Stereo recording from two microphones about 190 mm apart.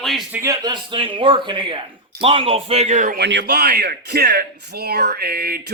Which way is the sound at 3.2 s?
65° right (ahead or behind).